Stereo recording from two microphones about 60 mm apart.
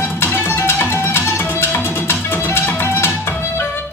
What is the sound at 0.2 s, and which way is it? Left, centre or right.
Music, left.